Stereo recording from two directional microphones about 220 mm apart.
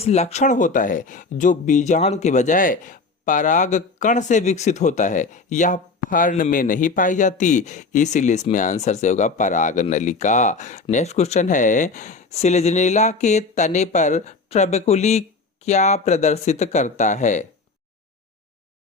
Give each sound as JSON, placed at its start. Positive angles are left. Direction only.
{"t": 0.0, "sound": "speech", "side_deg": 30}